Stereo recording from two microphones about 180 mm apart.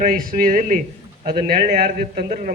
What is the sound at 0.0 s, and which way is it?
A man's voice, 50° right (ahead or behind).